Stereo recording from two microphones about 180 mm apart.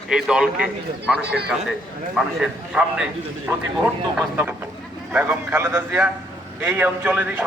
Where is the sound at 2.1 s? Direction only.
5° right (ahead or behind).